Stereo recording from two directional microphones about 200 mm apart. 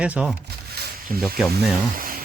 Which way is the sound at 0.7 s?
50° right (ahead or behind).